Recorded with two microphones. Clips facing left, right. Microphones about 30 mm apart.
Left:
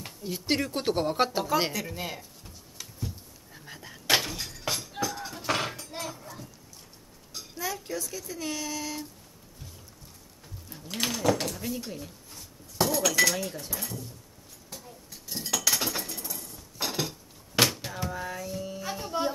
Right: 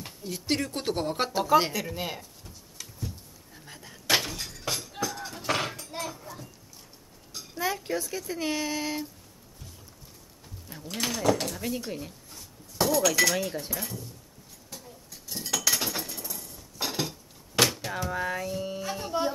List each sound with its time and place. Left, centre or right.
0.0 s speech: centre
2.4 s a sound: centre
3.5 s breaking: centre
7.5 s speech: right
10.9 s speech: centre
12.3 s chink: centre
13.7 s speech: centre
14.7 s a sound: centre
18.1 s a sound: centre
18.8 s speech: centre